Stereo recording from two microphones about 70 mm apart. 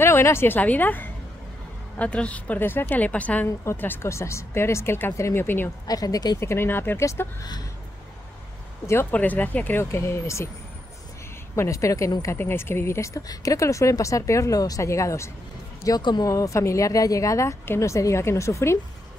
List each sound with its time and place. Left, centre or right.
0.0 s a woman's voice: left
0.6 s a woman's voice: left
2.0 s a woman's voice: centre
4.0 s speech: left
5.9 s speech: left
6.4 s speech: left
9.1 s a woman's voice: left
9.8 s speech: left
11.5 s a woman's voice: left
12.4 s speech: left
13.3 s a woman's voice: left
15.8 s speech: left
16.3 s a woman's voice: left